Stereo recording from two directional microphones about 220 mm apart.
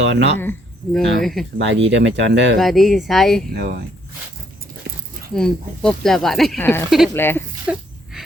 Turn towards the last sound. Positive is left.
turn(degrees=-5)  # may be behind; listen again after turning